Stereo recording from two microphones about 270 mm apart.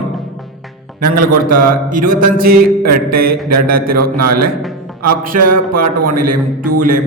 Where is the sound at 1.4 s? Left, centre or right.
Right.